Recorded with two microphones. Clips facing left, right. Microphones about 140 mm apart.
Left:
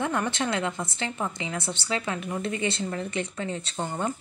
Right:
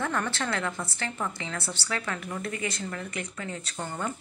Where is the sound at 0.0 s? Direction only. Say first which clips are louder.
Left 3 dB; 15° left (ahead or behind).